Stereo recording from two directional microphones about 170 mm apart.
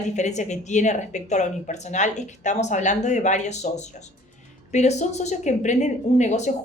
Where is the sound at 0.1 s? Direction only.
45° left (ahead or behind).